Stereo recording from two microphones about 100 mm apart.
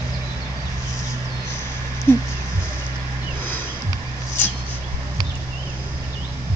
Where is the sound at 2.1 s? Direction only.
25° left (ahead or behind).